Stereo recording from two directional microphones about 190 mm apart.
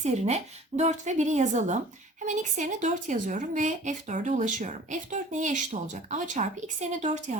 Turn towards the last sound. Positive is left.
turn(degrees=-35)  # may be behind; listen again after turning